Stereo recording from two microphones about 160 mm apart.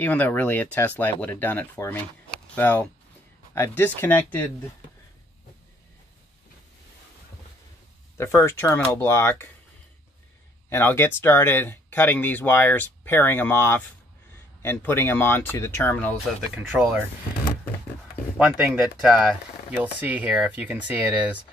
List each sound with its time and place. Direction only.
0.0 s speech: 10° left (ahead or behind)
8.2 s speech: 15° left (ahead or behind)
10.7 s speech: 15° left (ahead or behind)
16.7 s speech: 10° right (ahead or behind)
18.4 s speech: 5° right (ahead or behind)